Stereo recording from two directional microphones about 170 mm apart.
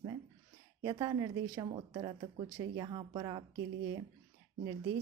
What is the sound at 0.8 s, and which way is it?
A woman's voice, 25° right (ahead or behind).